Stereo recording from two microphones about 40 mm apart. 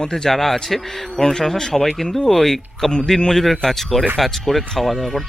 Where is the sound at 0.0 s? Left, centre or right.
Centre.